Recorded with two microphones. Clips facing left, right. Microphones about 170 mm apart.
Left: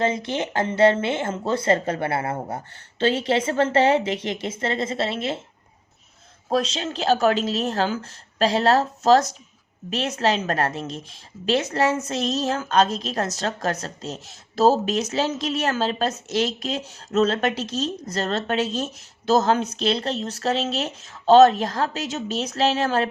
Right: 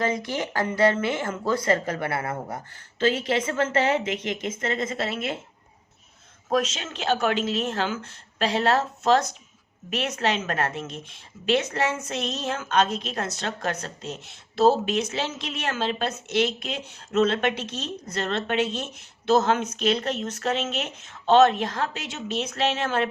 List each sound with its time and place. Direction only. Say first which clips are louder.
0.0 s speech: left 3 dB; 25° left (ahead or behind)
6.5 s a woman's voice: left 2 dB; 30° left (ahead or behind)